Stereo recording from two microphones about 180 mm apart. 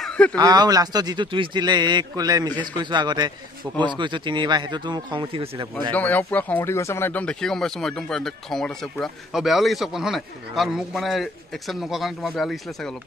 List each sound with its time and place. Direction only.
0.0 s a sound: 5° left (ahead or behind)
0.4 s speech: 20° right (ahead or behind)
5.9 s a man's voice: 10° left (ahead or behind)